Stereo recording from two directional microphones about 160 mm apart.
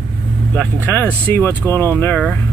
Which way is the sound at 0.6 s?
10° left (ahead or behind).